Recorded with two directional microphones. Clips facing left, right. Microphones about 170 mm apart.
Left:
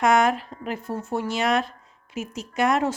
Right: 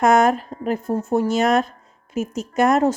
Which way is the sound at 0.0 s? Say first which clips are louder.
Right 4 dB; 45° right (ahead or behind).